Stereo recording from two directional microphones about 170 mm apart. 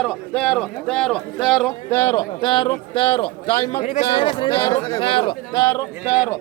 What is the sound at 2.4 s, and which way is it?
Speech, 25° left (ahead or behind).